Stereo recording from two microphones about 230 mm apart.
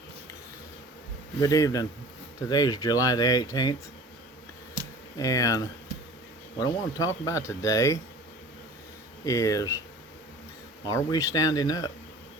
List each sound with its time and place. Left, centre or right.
1.4 s speech: centre
5.1 s speech: centre
9.2 s speech: centre
10.8 s speech: centre